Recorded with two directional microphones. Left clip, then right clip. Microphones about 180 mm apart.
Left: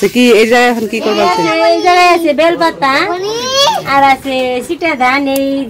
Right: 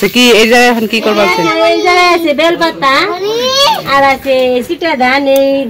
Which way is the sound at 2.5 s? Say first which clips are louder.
Right 1 dB; 25° left (ahead or behind).